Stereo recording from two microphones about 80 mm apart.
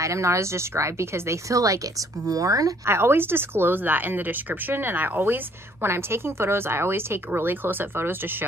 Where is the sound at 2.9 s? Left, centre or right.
Right.